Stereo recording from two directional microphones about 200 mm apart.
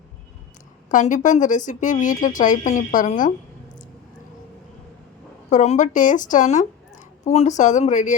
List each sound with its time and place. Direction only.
0.9 s speech: 40° left (ahead or behind)
5.5 s speech: 35° left (ahead or behind)